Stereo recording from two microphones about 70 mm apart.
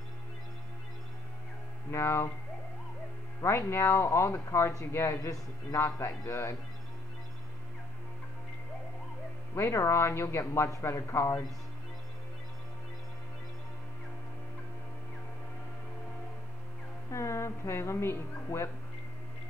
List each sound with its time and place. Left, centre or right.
1.9 s speech: left
3.4 s speech: left
5.2 s speech: left
9.6 s speech: left
17.1 s speech: left